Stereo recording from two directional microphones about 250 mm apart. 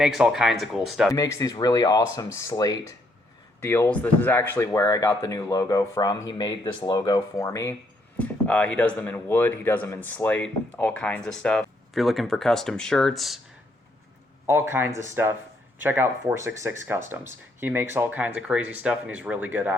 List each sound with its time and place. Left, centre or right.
0.0 s speech: centre
1.1 s speech: centre
14.7 s speech: centre